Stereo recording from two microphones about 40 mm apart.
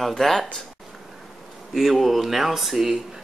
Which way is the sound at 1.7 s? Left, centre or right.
Centre.